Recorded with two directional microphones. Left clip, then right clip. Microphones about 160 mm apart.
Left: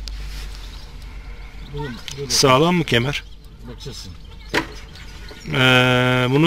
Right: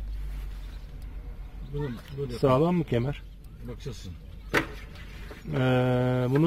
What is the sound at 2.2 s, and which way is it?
Speech, 5° right (ahead or behind).